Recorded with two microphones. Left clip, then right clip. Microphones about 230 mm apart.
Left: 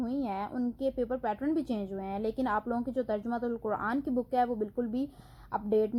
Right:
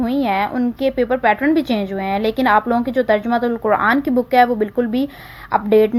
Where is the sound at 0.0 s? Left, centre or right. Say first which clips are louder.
Right 16 dB; right.